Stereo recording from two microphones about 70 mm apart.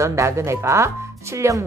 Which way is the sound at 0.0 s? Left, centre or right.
Right.